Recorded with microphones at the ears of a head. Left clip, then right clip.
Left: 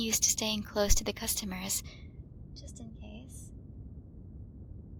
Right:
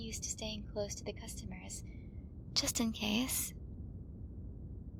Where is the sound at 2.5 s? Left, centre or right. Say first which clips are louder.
Right 17 dB; right.